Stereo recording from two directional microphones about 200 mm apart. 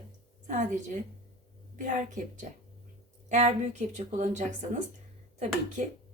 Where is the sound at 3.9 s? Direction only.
35° right (ahead or behind).